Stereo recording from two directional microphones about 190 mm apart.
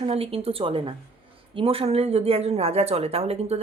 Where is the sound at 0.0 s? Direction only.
30° right (ahead or behind).